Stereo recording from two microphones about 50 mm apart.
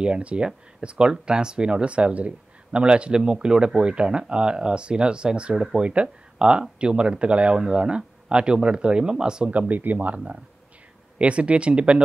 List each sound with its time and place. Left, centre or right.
0.0 s speech: right
9.5 s speech: right
10.1 s speech: right